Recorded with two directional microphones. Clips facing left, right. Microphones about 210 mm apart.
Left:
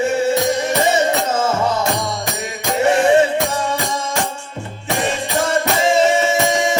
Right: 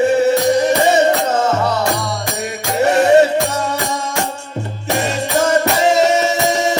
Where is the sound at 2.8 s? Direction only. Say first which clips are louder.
Right 2 dB; 40° right (ahead or behind).